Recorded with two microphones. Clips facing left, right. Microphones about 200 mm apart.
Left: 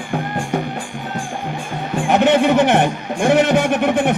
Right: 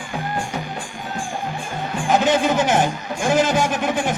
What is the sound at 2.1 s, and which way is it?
A man's voice, 65° left (ahead or behind).